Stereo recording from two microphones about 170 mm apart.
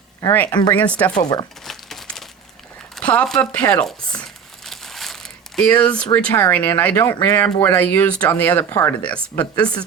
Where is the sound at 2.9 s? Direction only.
5° left (ahead or behind).